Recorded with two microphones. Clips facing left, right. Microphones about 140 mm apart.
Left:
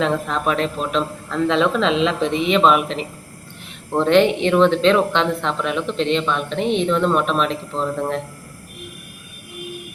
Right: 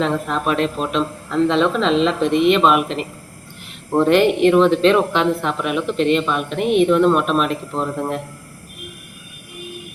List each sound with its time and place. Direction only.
0.0 s speech: centre (ahead or behind)